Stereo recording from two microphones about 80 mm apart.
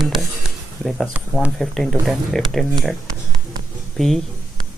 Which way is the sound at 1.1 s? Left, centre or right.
Right.